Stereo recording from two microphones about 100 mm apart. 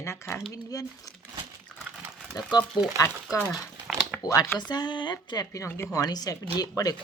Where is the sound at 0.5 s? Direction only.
35° left (ahead or behind).